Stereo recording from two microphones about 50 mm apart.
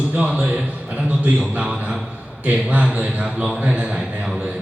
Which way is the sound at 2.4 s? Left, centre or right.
Right.